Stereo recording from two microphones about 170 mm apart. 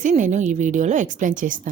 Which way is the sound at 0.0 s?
45° right (ahead or behind).